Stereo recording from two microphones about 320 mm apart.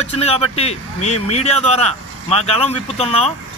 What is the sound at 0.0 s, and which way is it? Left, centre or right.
Speech, centre.